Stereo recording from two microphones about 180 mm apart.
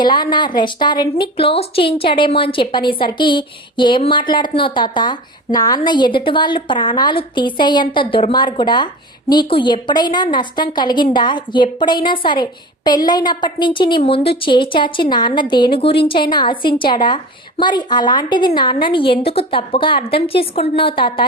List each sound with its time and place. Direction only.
0.0 s a woman's voice: 25° left (ahead or behind)